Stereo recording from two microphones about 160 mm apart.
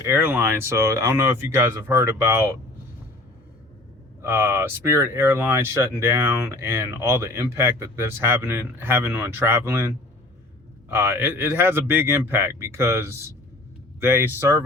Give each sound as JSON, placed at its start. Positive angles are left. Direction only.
{"t": 0.0, "sound": "speech", "side_deg": -15}
{"t": 4.2, "sound": "speech", "side_deg": -15}